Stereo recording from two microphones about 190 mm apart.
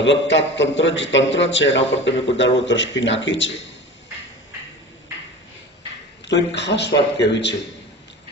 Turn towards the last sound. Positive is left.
turn(degrees=65)  # may be behind; listen again after turning